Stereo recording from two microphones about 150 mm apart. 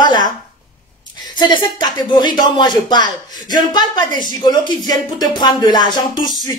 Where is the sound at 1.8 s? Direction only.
30° left (ahead or behind).